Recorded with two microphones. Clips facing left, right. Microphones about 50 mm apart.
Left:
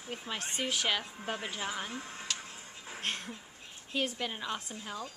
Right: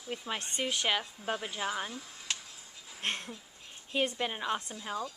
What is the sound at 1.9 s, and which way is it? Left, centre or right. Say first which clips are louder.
Speech: left 4 dB; left.